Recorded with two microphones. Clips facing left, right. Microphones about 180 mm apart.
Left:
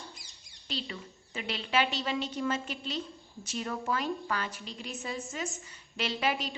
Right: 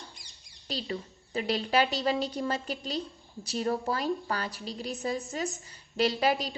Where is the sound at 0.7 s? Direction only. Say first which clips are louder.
Right 4 dB; 40° right (ahead or behind).